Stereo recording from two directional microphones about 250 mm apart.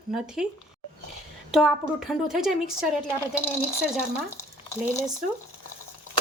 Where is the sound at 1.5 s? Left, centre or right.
Centre.